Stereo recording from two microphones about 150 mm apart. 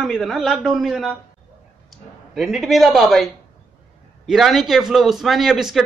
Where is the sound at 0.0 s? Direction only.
Centre (ahead or behind).